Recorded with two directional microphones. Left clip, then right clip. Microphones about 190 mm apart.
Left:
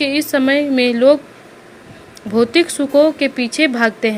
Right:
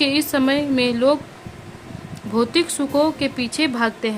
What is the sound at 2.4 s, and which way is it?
A woman's voice, 10° left (ahead or behind).